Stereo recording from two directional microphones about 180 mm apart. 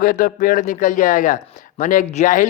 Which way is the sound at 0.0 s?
50° left (ahead or behind).